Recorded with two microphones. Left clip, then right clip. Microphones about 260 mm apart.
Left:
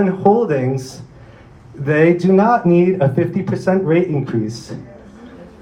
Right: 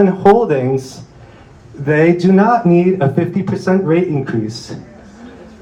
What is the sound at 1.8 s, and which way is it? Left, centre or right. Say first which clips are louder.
Speech: right 1 dB; right.